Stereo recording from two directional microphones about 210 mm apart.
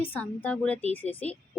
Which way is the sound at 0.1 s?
10° left (ahead or behind).